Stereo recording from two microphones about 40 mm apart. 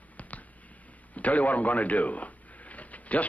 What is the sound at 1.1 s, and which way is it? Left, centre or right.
A man's voice, left.